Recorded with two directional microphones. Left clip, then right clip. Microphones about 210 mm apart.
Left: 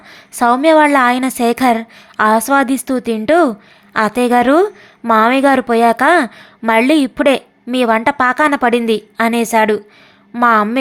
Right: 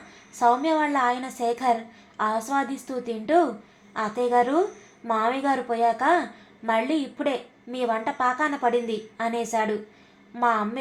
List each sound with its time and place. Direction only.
0.3 s a woman's voice: 45° left (ahead or behind)